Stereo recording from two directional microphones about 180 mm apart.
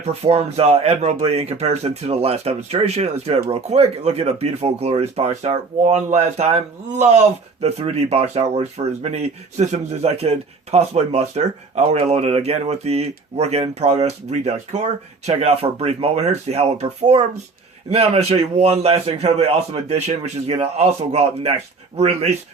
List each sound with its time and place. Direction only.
0.0 s speech: 35° right (ahead or behind)